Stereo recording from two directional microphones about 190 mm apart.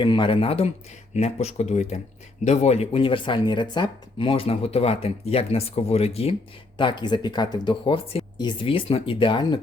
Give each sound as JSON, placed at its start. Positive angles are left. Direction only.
{"t": 0.0, "sound": "speech", "side_deg": 25}